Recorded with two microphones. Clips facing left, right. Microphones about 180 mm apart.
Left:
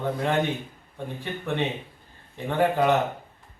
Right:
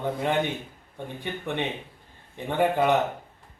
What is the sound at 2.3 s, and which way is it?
Speech, 15° right (ahead or behind).